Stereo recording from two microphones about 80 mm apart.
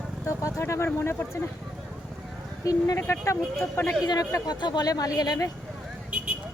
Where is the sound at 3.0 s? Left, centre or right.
Left.